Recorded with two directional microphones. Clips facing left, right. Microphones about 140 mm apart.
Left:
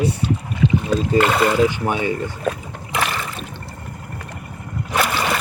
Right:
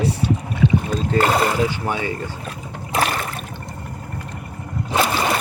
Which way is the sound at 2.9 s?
35° right (ahead or behind).